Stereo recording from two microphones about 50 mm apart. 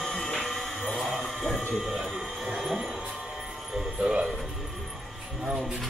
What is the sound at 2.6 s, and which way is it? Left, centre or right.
Music, centre.